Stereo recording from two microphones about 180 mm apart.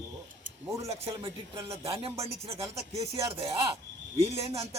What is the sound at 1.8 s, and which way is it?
Speech, 35° right (ahead or behind).